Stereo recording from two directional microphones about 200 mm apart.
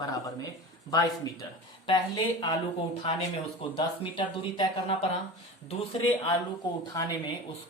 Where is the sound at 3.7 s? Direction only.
25° left (ahead or behind).